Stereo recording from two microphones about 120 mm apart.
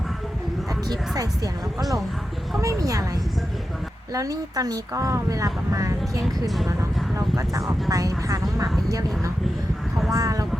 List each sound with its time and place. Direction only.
0.9 s speech: 30° right (ahead or behind)
2.6 s a woman's voice: 30° right (ahead or behind)
4.1 s a woman's voice: 30° right (ahead or behind)